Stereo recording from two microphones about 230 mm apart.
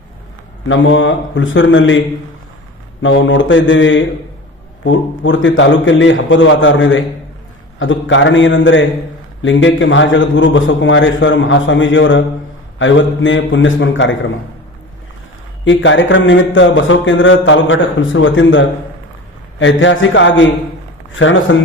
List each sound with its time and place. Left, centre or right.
0.7 s speech: left
3.0 s speech: left
15.6 s speech: left
21.5 s speech: left